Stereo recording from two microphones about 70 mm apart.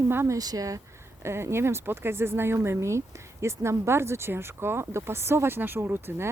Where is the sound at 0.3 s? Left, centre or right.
Right.